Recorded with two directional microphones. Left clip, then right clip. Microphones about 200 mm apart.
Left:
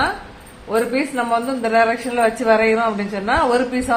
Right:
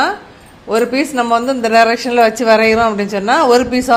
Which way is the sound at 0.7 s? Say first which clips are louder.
Right 5 dB; 55° right (ahead or behind).